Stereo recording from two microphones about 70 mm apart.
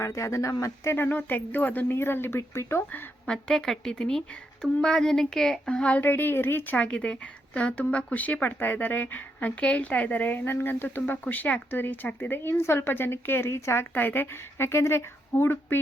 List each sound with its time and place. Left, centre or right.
0.0 s speech: left
0.9 s a woman's voice: left
3.2 s speech: centre
6.0 s a woman's voice: left
14.7 s speech: left